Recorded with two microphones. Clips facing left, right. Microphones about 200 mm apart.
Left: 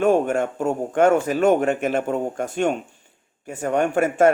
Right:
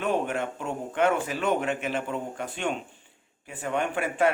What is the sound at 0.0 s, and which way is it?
Speech, 45° left (ahead or behind).